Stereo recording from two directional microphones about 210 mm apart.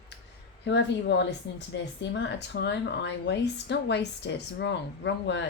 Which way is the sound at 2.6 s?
55° left (ahead or behind).